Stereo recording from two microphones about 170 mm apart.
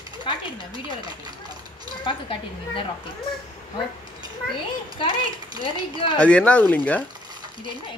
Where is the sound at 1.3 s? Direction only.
25° right (ahead or behind).